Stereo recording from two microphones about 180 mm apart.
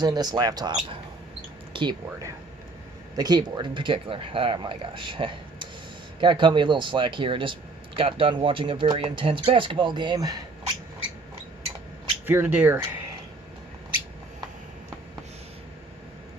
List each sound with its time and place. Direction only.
0.0 s speech: 20° right (ahead or behind)
3.2 s speech: 25° right (ahead or behind)
12.2 s speech: 10° right (ahead or behind)